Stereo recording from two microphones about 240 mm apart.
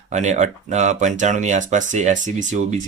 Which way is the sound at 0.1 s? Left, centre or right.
Right.